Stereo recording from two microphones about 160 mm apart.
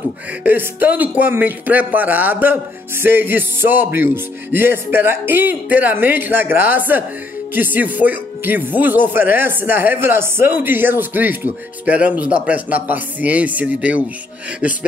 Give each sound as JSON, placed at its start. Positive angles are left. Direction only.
{"t": 0.4, "sound": "speech", "side_deg": -10}